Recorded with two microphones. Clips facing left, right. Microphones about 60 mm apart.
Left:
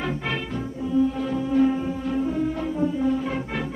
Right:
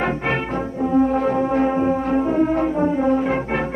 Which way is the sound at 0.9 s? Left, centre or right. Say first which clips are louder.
Right 5 dB; right.